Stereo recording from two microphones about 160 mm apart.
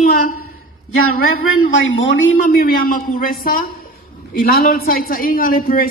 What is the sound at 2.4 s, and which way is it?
Speech, 60° left (ahead or behind).